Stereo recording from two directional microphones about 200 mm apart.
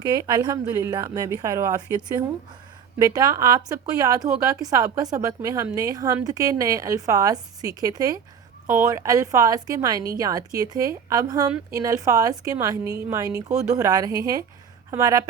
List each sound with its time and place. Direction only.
0.0 s a woman's voice: 20° right (ahead or behind)